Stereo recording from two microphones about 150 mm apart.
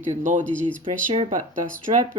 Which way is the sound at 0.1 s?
60° right (ahead or behind).